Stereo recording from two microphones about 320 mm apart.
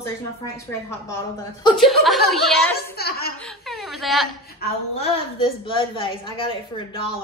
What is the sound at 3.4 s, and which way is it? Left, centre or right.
Whimper, centre.